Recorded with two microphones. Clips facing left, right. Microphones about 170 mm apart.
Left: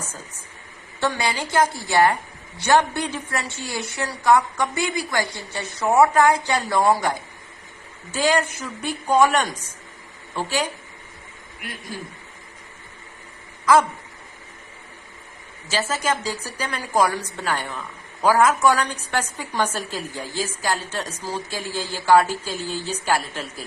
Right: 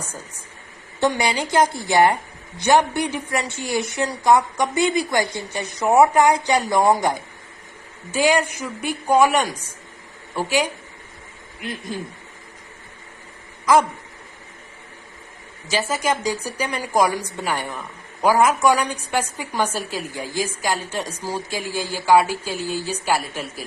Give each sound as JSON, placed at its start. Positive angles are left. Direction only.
{"t": 0.9, "sound": "a woman's voice", "side_deg": -20}
{"t": 15.7, "sound": "a woman's voice", "side_deg": -15}